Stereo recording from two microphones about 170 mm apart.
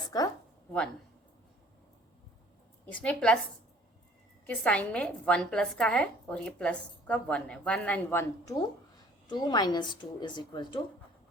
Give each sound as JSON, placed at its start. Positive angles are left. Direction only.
{"t": 2.8, "sound": "a woman's voice", "side_deg": 10}
{"t": 4.4, "sound": "a woman's voice", "side_deg": 10}
{"t": 9.3, "sound": "a woman's voice", "side_deg": 25}